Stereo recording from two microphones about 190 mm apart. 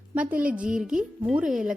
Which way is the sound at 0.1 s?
10° right (ahead or behind).